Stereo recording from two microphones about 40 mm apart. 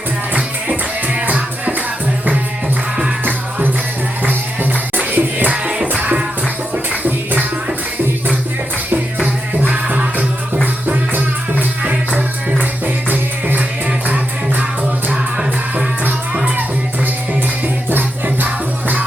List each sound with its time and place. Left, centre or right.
0.3 s music: right
4.2 s music: right
9.6 s music: right
13.1 s music: right